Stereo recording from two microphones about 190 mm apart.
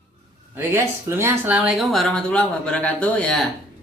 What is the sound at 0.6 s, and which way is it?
Speech, 15° right (ahead or behind).